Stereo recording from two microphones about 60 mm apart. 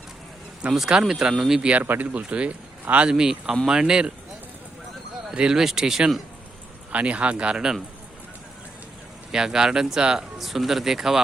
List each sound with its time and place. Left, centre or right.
0.7 s speech: centre
1.8 s speech: right
3.1 s speech: centre
5.3 s speech: centre
6.9 s speech: right
9.3 s speech: centre